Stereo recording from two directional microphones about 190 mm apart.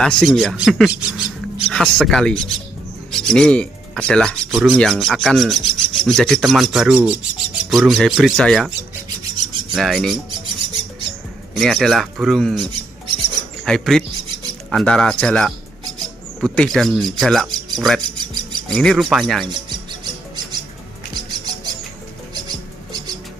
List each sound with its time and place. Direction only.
0.0 s speech: centre (ahead or behind)
10.3 s bird: 25° right (ahead or behind)
11.5 s speech: centre (ahead or behind)
13.7 s speech: centre (ahead or behind)
19.4 s music: 25° right (ahead or behind)